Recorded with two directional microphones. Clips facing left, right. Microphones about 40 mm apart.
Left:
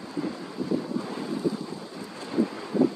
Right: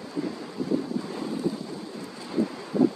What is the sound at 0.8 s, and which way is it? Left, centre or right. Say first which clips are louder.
Waves: even; left.